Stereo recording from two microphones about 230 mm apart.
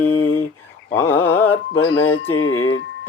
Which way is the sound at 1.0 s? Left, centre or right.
Centre.